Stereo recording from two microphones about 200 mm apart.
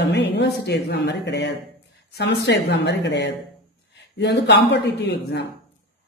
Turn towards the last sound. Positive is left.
turn(degrees=55)  # may be behind; listen again after turning